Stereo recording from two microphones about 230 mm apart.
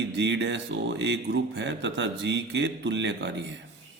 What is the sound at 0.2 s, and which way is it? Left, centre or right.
Speech, right.